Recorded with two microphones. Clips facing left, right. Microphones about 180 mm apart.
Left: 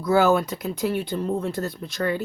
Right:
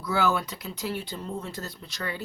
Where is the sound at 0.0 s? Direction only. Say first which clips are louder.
Left 7 dB; 45° left (ahead or behind).